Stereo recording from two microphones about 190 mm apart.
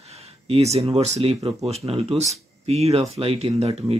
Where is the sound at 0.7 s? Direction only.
35° right (ahead or behind).